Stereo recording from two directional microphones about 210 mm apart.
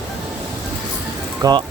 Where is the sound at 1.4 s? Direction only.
15° right (ahead or behind).